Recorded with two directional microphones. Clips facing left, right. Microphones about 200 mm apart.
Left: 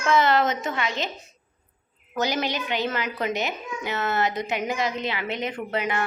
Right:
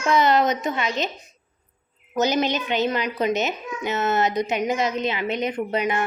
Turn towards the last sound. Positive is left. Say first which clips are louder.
# right 3 dB
turn(degrees=-20)  # may be behind; listen again after turning